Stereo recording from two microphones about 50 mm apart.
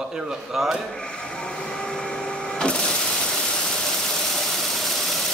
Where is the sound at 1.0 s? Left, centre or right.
Centre.